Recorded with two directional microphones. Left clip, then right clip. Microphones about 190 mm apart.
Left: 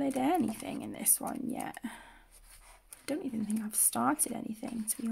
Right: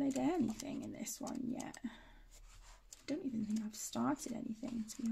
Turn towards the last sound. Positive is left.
turn(degrees=45)  # may be behind; listen again after turning